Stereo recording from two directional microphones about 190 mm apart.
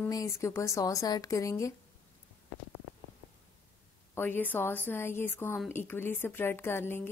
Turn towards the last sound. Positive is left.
turn(degrees=10)  # may be behind; listen again after turning